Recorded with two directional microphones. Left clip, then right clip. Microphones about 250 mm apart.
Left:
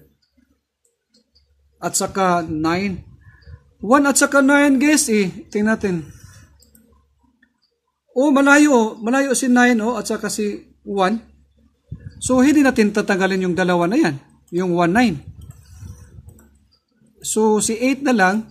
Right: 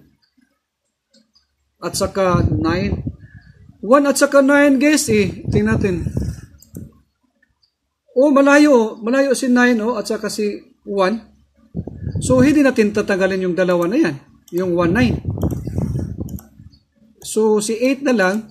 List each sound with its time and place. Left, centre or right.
1.8 s a man's voice: centre
8.1 s a man's voice: centre
12.2 s a man's voice: centre
17.2 s a man's voice: centre